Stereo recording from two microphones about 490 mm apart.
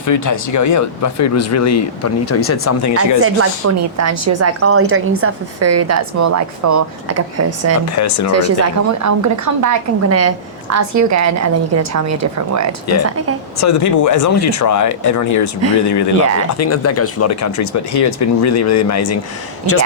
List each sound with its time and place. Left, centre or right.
0.0 s speech: left
3.2 s a woman's voice: right
7.9 s speech: left
8.3 s a woman's voice: right
13.6 s speech: left